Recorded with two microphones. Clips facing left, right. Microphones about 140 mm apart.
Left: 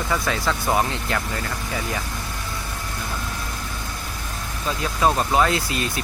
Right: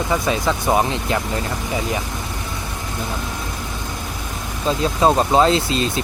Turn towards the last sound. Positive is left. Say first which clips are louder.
# right 6 dB
turn(degrees=-25)  # may be behind; listen again after turning